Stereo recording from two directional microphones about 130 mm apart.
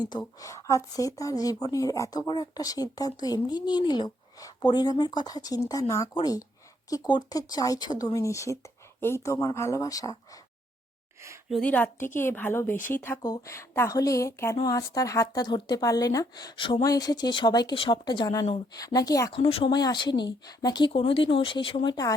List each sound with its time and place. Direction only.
0.3 s speech: 25° left (ahead or behind)
11.6 s a woman's voice: 10° left (ahead or behind); by 19.3 s 25° left (ahead or behind)
19.3 s speech: 45° left (ahead or behind)
19.7 s speech: 35° left (ahead or behind)
21.8 s speech: 30° left (ahead or behind)